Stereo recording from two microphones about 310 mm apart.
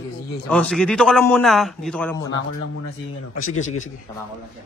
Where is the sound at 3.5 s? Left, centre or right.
Left.